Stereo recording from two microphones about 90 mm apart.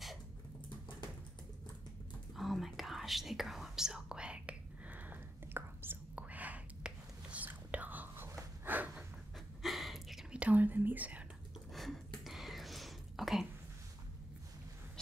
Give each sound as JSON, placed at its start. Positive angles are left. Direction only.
{"t": 2.3, "sound": "whispering", "side_deg": 0}
{"t": 9.6, "sound": "a sound", "side_deg": 0}
{"t": 10.3, "sound": "whispering", "side_deg": -15}
{"t": 11.7, "sound": "whispering", "side_deg": 0}